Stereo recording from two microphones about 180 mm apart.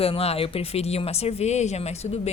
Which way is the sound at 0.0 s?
35° left (ahead or behind).